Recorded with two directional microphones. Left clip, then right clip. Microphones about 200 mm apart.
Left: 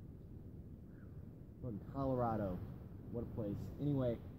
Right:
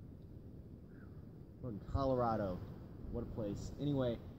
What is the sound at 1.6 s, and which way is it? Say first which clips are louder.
Speech: right 3 dB; 5° right (ahead or behind).